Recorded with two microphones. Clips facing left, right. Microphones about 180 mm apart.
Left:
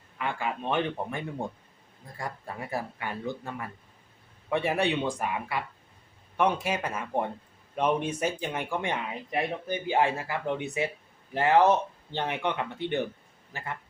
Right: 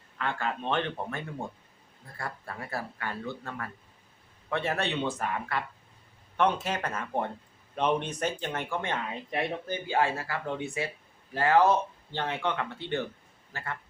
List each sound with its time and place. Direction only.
0.2 s speech: 10° left (ahead or behind)